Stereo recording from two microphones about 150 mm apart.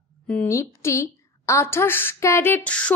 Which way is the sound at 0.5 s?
20° left (ahead or behind).